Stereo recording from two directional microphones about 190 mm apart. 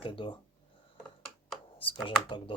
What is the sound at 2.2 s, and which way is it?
Speech, 25° left (ahead or behind).